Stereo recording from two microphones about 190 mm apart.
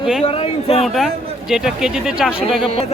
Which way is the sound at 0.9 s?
Centre (ahead or behind).